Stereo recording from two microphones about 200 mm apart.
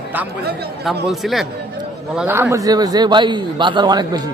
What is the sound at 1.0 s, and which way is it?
A man's voice, centre (ahead or behind).